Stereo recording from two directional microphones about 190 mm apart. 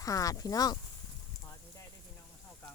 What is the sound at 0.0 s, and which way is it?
Speech, 20° left (ahead or behind).